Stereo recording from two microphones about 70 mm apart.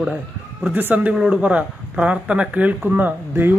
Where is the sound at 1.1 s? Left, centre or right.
Centre.